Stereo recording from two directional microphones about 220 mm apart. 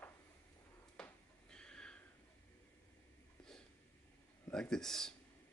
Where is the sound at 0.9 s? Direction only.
5° left (ahead or behind).